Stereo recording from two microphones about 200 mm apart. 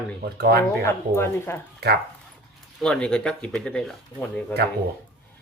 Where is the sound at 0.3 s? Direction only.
50° right (ahead or behind).